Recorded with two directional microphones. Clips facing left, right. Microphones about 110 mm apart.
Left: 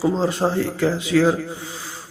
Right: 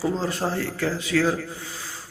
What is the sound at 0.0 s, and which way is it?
A man's voice, 20° left (ahead or behind).